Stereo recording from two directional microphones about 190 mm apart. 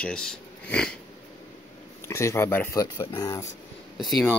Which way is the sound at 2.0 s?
15° left (ahead or behind).